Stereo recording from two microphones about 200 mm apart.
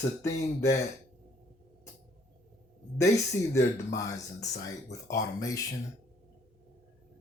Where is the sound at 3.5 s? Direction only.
15° left (ahead or behind).